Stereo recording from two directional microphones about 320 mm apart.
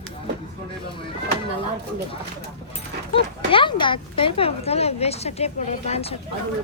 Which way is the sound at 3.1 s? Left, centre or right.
Centre.